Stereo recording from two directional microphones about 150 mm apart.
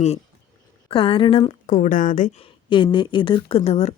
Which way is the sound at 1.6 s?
60° left (ahead or behind).